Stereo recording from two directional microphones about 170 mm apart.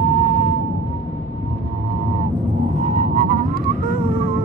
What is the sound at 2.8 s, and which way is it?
Music, 45° right (ahead or behind).